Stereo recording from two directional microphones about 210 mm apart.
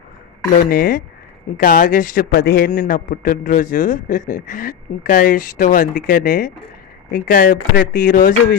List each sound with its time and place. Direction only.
0.5 s a man's voice: 40° left (ahead or behind)